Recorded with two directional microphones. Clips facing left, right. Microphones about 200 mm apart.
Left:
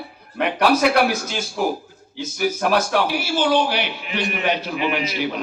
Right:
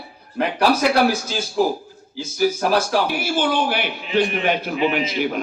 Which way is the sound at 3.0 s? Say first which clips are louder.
Left 1 dB; 50° right (ahead or behind).